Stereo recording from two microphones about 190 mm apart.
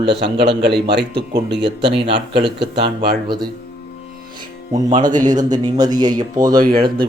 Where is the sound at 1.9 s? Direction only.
30° right (ahead or behind).